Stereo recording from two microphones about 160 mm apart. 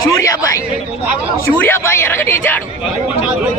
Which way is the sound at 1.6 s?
15° left (ahead or behind).